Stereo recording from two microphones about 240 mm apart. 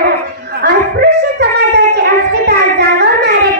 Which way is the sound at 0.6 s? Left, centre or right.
Right.